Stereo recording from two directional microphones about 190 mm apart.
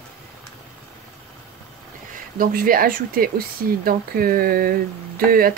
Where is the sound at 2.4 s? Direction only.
50° right (ahead or behind).